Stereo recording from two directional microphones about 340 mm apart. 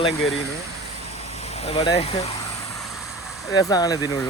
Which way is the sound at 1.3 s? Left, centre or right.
Centre.